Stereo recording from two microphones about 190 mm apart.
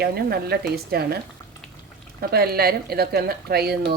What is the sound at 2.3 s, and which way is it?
A woman's voice, 55° right (ahead or behind).